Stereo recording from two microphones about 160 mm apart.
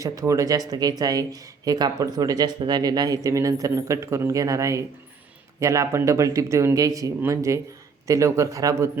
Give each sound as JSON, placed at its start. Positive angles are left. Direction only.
{"t": 0.0, "sound": "speech", "side_deg": -20}